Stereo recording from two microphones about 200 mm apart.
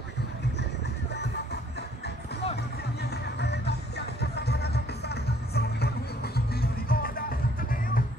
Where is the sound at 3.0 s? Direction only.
55° left (ahead or behind).